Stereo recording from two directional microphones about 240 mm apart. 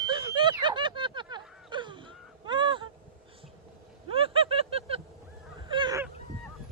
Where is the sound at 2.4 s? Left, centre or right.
Centre.